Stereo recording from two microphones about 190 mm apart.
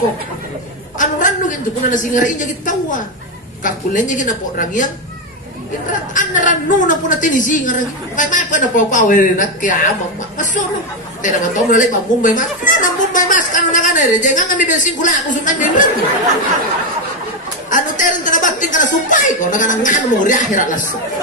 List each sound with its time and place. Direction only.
0.9 s a woman's voice: 45° left (ahead or behind)
6.1 s speech: 45° left (ahead or behind)
10.3 s chuckle: 40° left (ahead or behind)
11.2 s speech: 40° left (ahead or behind)
17.6 s a woman's voice: 45° left (ahead or behind)